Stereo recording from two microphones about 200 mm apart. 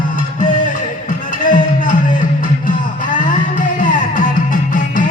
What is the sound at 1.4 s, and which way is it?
Music, 40° left (ahead or behind).